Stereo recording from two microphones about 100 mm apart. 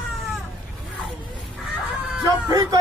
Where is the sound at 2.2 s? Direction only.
35° right (ahead or behind).